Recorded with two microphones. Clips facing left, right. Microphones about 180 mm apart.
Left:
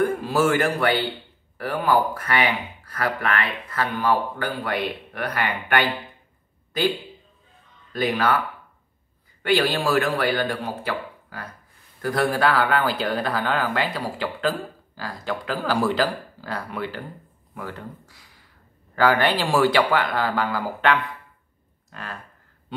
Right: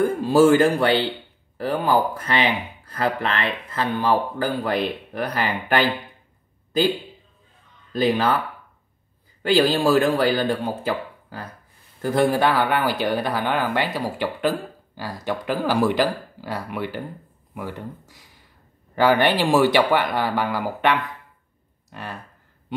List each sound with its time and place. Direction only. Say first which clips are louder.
0.0 s speech: right 5 dB; 30° right (ahead or behind)
7.9 s speech: right 2 dB; 30° right (ahead or behind)
9.4 s speech: right 3 dB; 30° right (ahead or behind)
12.0 s speech: right 3 dB; 20° right (ahead or behind)
21.9 s speech: right 2 dB; 15° right (ahead or behind)